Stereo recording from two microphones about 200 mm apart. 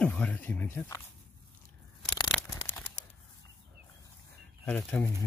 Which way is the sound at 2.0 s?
20° left (ahead or behind).